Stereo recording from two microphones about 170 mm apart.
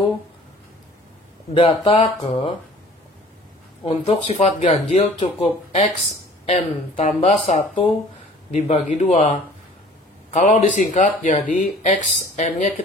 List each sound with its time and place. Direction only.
1.5 s speech: 35° left (ahead or behind)
3.8 s speech: 35° left (ahead or behind)